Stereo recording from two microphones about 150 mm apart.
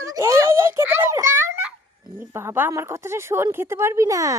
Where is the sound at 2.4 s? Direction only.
15° right (ahead or behind).